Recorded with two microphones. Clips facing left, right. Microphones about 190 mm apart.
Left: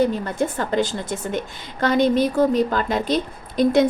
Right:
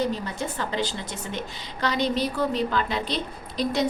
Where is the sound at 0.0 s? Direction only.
55° left (ahead or behind).